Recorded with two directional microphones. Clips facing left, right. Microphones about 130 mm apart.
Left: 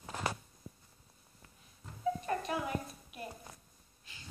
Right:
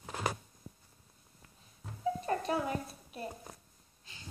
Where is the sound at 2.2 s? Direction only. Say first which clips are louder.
Right 3 dB; 30° right (ahead or behind).